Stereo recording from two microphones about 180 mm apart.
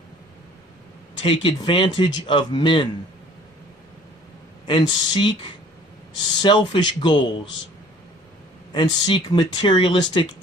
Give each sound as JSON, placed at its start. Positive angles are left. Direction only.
{"t": 1.2, "sound": "speech", "side_deg": 30}
{"t": 4.6, "sound": "speech", "side_deg": 25}
{"t": 8.7, "sound": "speech", "side_deg": 25}